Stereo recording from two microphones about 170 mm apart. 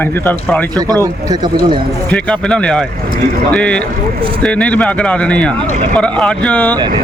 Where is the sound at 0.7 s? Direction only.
20° right (ahead or behind).